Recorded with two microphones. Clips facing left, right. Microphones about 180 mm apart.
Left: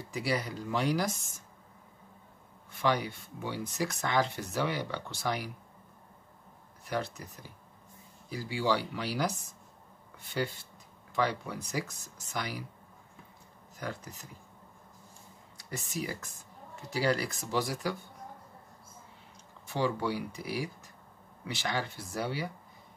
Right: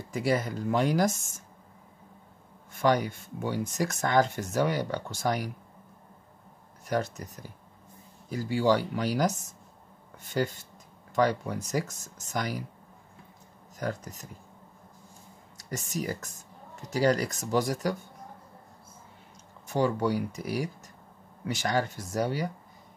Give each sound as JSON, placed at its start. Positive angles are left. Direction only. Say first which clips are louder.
{"t": 0.1, "sound": "speech", "louder": "right 5 dB", "side_deg": -50}
{"t": 2.7, "sound": "speech", "louder": "right 5 dB", "side_deg": -45}
{"t": 6.9, "sound": "speech", "louder": "right 5 dB", "side_deg": -45}
{"t": 13.7, "sound": "speech", "louder": "right 6 dB", "side_deg": -45}
{"t": 15.5, "sound": "speech", "louder": "right 4 dB", "side_deg": -45}
{"t": 19.7, "sound": "speech", "louder": "right 5 dB", "side_deg": -45}